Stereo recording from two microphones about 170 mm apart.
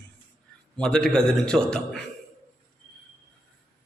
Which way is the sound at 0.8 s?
5° left (ahead or behind).